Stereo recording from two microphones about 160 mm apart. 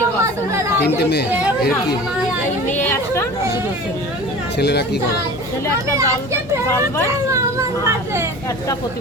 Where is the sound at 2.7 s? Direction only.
15° left (ahead or behind).